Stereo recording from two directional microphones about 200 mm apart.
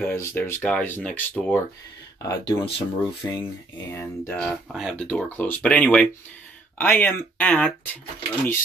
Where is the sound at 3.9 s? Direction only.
5° left (ahead or behind).